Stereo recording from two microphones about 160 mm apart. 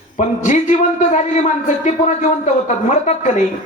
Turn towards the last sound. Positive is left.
turn(degrees=50)  # may be behind; listen again after turning